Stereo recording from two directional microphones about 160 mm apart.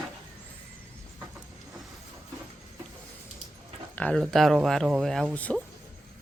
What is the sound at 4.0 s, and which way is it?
Speech, 5° left (ahead or behind).